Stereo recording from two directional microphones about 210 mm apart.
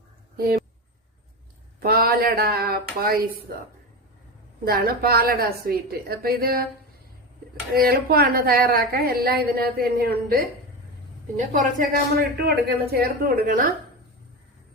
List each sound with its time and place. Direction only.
0.3 s a woman's voice: 45° right (ahead or behind)
1.8 s a woman's voice: 45° right (ahead or behind)
7.7 s a woman's voice: 45° right (ahead or behind)